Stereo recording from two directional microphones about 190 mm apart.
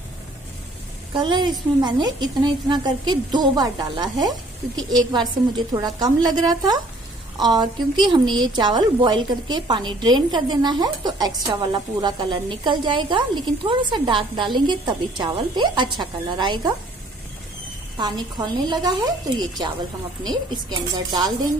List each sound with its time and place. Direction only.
1.1 s a woman's voice: 25° right (ahead or behind)
17.9 s a woman's voice: 25° right (ahead or behind)